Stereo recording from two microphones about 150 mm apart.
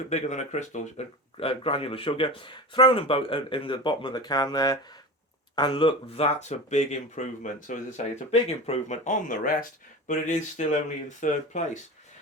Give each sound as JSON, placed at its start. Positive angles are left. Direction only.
{"t": 0.1, "sound": "speech", "side_deg": 50}
{"t": 10.1, "sound": "speech", "side_deg": 55}